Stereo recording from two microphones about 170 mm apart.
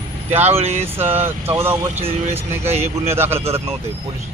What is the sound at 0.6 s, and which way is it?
Speech, 40° right (ahead or behind).